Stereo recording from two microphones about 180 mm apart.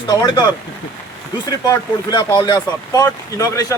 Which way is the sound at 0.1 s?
20° left (ahead or behind).